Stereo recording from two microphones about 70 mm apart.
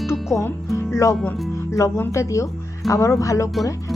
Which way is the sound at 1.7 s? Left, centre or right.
Left.